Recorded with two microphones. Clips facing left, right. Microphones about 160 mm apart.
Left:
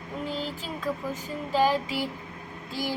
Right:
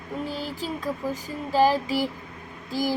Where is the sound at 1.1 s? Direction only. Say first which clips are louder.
Right 2 dB; 40° right (ahead or behind).